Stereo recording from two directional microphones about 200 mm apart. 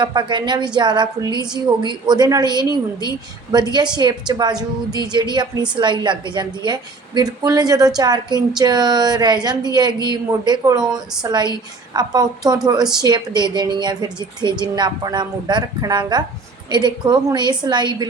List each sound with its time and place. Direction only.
0.0 s a woman's voice: 20° right (ahead or behind)